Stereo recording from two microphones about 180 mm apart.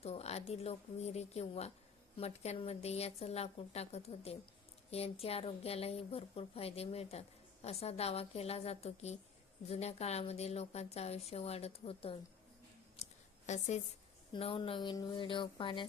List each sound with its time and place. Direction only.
0.0 s a woman's voice: 35° left (ahead or behind)
13.0 s a sound: 35° left (ahead or behind)
13.5 s a woman's voice: 40° left (ahead or behind)
14.3 s a woman's voice: 30° left (ahead or behind)